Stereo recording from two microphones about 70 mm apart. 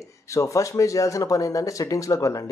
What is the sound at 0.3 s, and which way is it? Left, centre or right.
Speech, left.